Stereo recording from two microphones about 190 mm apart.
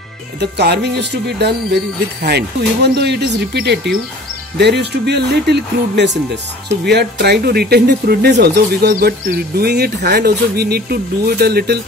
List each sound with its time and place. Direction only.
0.4 s speech: 60° right (ahead or behind)